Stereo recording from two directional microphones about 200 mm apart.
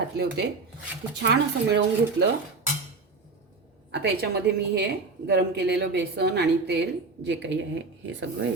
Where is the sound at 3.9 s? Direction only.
55° right (ahead or behind).